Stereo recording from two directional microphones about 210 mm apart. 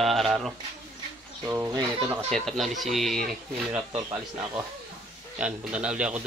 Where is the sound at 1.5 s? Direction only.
15° right (ahead or behind).